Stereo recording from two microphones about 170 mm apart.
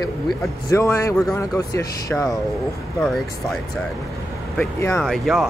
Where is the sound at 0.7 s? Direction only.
15° left (ahead or behind).